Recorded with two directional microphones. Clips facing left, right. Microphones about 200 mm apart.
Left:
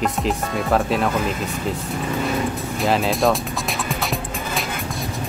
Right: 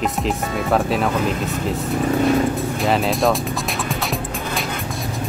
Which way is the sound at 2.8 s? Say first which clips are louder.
Left 1 dB; centre (ahead or behind).